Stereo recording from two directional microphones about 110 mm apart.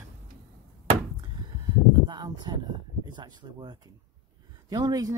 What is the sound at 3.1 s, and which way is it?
Speech, 45° right (ahead or behind).